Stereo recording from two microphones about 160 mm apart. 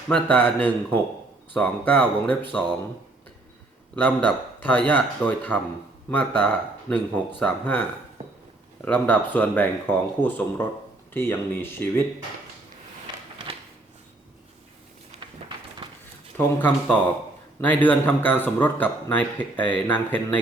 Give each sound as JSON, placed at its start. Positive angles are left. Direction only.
{"t": 0.1, "sound": "a man's voice", "side_deg": 10}
{"t": 3.9, "sound": "a man's voice", "side_deg": 10}
{"t": 15.2, "sound": "a sound", "side_deg": -30}
{"t": 16.6, "sound": "a man's voice", "side_deg": 10}